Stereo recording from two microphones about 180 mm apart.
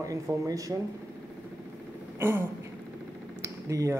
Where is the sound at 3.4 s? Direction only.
15° right (ahead or behind).